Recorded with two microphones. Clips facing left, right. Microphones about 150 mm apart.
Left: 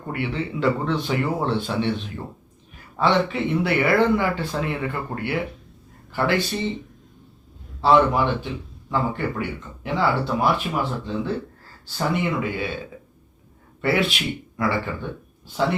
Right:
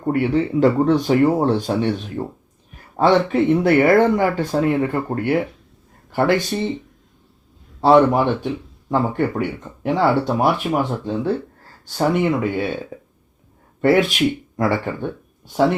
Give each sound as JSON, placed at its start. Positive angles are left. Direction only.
{"t": 0.0, "sound": "speech", "side_deg": -40}
{"t": 7.8, "sound": "a man's voice", "side_deg": -45}
{"t": 12.9, "sound": "burping", "side_deg": -35}
{"t": 13.8, "sound": "speech", "side_deg": -45}